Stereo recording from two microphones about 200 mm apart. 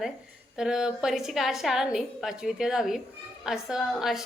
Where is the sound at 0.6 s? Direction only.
5° right (ahead or behind).